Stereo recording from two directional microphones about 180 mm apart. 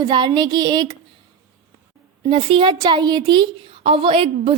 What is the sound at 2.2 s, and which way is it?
A woman's voice, 30° right (ahead or behind).